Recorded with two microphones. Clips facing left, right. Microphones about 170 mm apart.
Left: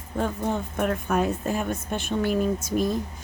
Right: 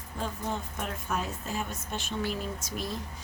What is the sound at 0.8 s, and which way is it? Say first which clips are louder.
A woman's voice: left 13 dB; 55° left (ahead or behind).